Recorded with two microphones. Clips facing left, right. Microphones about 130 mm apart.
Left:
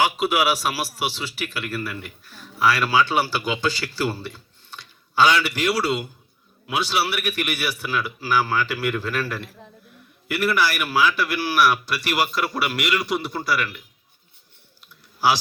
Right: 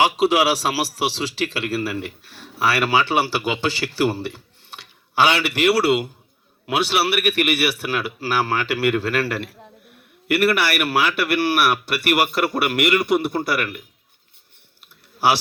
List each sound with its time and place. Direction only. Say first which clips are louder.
0.0 s a man's voice: right 3 dB; 35° right (ahead or behind)
1.2 s speech: right 6 dB; 90° right
1.8 s a man's voice: right 6 dB; 75° right (ahead or behind); by 13.8 s 55° right (ahead or behind)
14.8 s clicking: right 2 dB; 60° right (ahead or behind)